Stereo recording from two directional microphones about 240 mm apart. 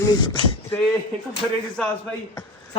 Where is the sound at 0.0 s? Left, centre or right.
Centre.